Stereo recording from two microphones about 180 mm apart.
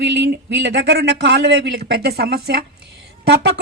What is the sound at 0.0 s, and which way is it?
A woman's voice, 75° right (ahead or behind).